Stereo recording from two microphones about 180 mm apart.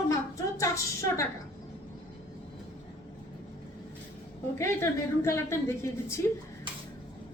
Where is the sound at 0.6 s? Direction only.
15° left (ahead or behind).